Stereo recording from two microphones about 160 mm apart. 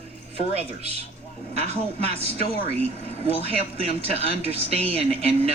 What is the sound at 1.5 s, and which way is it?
Speech, 40° right (ahead or behind).